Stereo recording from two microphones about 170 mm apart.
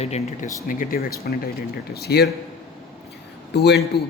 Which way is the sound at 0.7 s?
55° left (ahead or behind).